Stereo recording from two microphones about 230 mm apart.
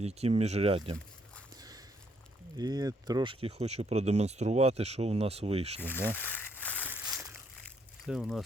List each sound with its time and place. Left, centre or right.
0.0 s speech: right
1.5 s a sound: centre
2.6 s speech: centre
5.8 s speech: centre
6.1 s crumpling: centre
8.0 s speech: centre